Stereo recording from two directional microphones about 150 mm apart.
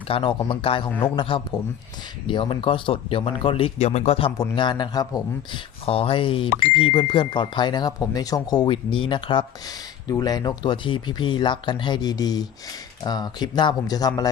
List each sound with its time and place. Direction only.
0.1 s speech: 35° left (ahead or behind)
4.4 s speech: 30° left (ahead or behind)
5.8 s speech: 40° left (ahead or behind)